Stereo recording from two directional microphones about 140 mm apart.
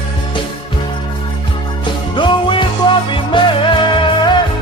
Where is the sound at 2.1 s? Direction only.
35° left (ahead or behind).